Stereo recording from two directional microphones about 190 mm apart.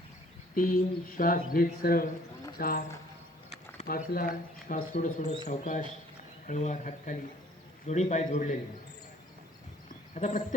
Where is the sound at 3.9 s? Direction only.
50° left (ahead or behind).